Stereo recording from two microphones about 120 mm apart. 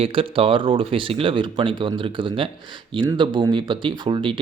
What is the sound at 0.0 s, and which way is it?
Speech, 50° right (ahead or behind).